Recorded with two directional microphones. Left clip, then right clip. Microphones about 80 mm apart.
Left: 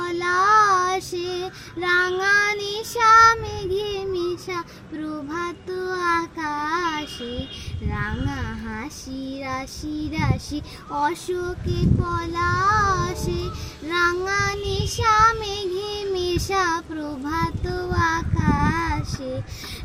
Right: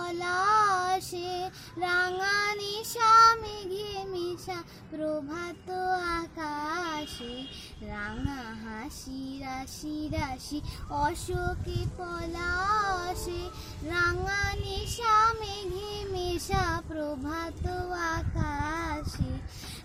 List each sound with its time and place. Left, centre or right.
0.0 s child singing: right